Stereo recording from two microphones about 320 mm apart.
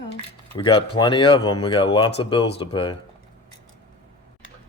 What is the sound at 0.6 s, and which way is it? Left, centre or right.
Speech, centre.